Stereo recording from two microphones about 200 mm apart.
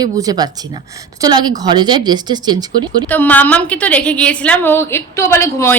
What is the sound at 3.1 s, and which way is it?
A woman's voice, 10° left (ahead or behind).